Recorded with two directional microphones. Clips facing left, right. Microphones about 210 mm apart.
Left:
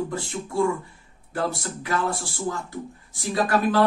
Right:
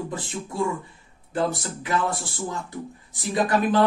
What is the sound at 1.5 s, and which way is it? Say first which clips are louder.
Speech: right 1 dB; 20° right (ahead or behind).